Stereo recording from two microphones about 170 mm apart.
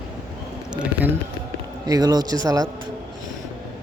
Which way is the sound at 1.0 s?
10° right (ahead or behind).